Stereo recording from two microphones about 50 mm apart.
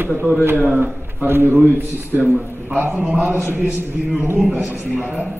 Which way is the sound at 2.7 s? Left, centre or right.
Right.